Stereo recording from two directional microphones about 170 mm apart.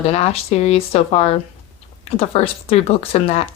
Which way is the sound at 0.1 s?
40° left (ahead or behind).